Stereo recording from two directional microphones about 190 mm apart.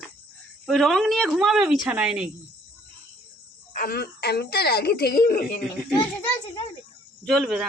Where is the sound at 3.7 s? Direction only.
50° left (ahead or behind).